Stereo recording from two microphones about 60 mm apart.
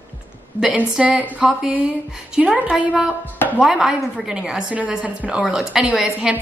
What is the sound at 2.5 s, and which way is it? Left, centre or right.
Speech, right.